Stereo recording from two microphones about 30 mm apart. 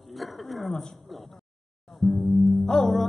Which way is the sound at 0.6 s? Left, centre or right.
Centre.